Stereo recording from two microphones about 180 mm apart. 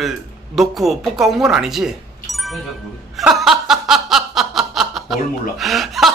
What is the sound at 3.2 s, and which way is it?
Snicker, centre (ahead or behind).